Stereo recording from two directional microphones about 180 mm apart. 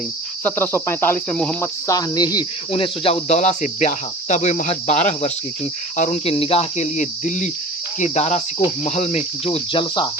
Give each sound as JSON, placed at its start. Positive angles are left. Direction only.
{"t": 0.4, "sound": "cricket", "side_deg": 10}
{"t": 1.9, "sound": "speech", "side_deg": 20}